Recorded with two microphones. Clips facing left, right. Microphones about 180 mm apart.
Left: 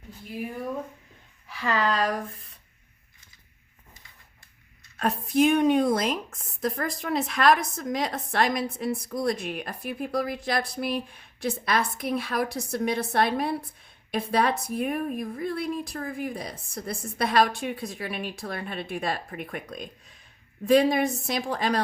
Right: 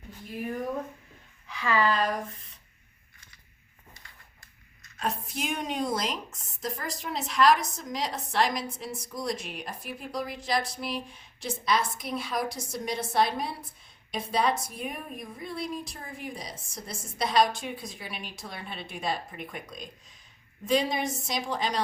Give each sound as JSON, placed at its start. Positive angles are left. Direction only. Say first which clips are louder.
{"t": 1.6, "sound": "a woman's voice", "louder": "left 1 dB", "side_deg": 40}
{"t": 4.9, "sound": "a woman's voice", "louder": "left 10 dB", "side_deg": 60}